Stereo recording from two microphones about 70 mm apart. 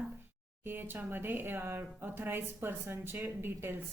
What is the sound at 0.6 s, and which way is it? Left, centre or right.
Speech, right.